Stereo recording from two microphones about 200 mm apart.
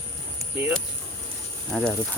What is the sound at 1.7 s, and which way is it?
Speech, centre (ahead or behind).